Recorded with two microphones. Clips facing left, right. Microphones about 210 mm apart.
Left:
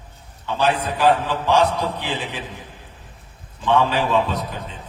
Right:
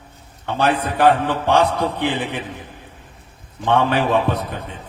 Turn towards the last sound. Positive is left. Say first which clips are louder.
# right 2 dB
turn(degrees=-55)  # may be behind; listen again after turning